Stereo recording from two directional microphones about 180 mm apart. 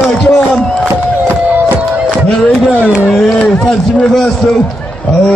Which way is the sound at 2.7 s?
10° right (ahead or behind).